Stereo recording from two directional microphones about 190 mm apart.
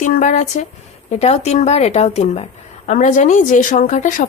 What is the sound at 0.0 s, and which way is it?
Speech, 40° left (ahead or behind).